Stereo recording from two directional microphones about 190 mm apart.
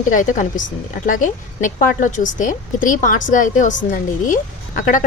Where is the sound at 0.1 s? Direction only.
40° left (ahead or behind).